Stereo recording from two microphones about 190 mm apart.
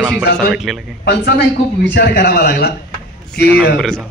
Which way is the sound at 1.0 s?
60° left (ahead or behind).